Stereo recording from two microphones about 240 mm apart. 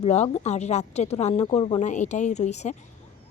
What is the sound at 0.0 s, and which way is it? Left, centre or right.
Speech, left.